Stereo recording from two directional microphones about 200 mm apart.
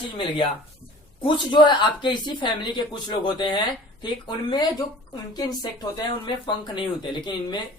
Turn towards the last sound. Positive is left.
turn(degrees=25)  # may be behind; listen again after turning